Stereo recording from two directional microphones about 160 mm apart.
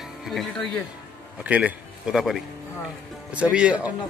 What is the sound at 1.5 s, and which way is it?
Speech, 10° right (ahead or behind).